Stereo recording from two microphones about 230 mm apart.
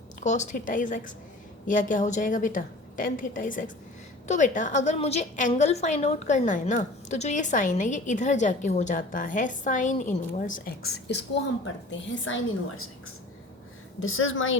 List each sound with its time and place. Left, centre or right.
0.2 s a woman's voice: left
14.0 s a woman's voice: left